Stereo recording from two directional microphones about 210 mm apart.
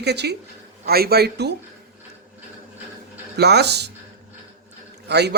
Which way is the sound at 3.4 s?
50° right (ahead or behind).